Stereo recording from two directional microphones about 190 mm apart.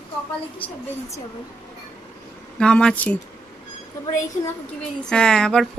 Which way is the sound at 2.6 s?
5° left (ahead or behind).